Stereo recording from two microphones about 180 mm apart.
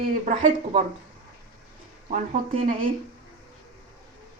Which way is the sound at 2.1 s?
45° right (ahead or behind).